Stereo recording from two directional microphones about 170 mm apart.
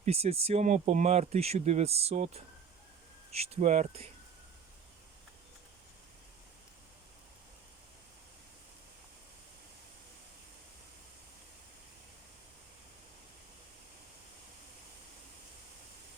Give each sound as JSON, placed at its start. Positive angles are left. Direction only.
{"t": 0.0, "sound": "speech", "side_deg": -40}